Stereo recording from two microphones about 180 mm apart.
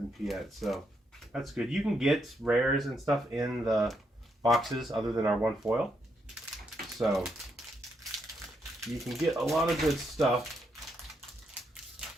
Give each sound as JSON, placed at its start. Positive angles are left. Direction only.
{"t": 0.3, "sound": "speech", "side_deg": 0}
{"t": 5.0, "sound": "speech", "side_deg": -20}
{"t": 5.3, "sound": "speech", "side_deg": -10}
{"t": 6.7, "sound": "typewriter", "side_deg": 0}
{"t": 7.3, "sound": "crumpling", "side_deg": 0}
{"t": 8.8, "sound": "speech", "side_deg": 0}